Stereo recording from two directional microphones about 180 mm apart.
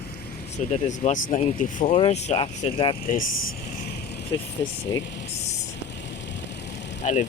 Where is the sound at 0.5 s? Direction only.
40° left (ahead or behind).